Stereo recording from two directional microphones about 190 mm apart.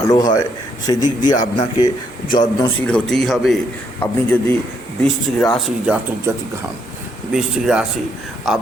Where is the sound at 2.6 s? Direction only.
5° left (ahead or behind).